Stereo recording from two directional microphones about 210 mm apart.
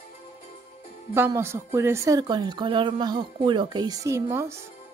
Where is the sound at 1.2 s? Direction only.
10° right (ahead or behind).